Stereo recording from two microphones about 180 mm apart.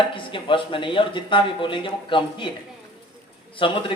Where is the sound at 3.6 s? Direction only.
30° left (ahead or behind).